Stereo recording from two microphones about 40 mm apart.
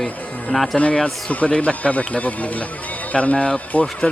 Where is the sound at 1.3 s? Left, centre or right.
Left.